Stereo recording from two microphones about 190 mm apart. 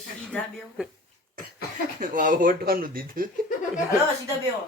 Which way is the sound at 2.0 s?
45° right (ahead or behind).